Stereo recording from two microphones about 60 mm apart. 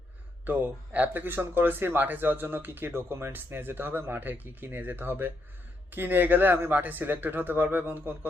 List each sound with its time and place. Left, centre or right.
0.4 s speech: right